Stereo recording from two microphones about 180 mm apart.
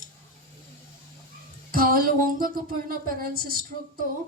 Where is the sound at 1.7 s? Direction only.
50° right (ahead or behind).